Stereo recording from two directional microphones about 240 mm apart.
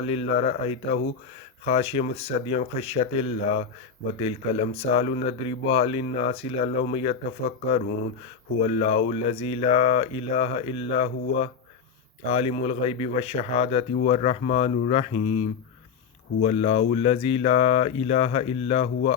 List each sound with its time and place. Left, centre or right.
0.0 s speech: left